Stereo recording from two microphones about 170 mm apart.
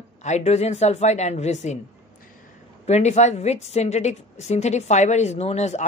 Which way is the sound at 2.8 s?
40° left (ahead or behind).